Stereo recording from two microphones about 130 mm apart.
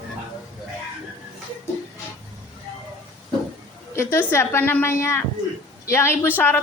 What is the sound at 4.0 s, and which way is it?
A woman's voice, 20° left (ahead or behind).